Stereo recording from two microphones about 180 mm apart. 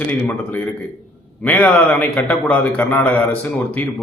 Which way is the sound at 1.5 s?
10° left (ahead or behind).